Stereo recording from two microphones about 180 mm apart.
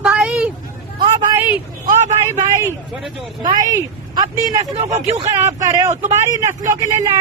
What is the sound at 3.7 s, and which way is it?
A woman's voice, 20° right (ahead or behind).